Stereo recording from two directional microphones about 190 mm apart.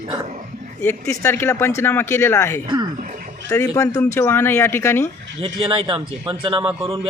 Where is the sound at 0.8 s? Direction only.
15° left (ahead or behind).